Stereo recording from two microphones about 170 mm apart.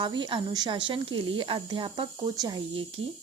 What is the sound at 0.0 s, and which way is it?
Speech, 30° right (ahead or behind).